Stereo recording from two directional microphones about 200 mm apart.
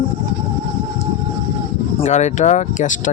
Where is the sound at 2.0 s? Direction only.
35° left (ahead or behind).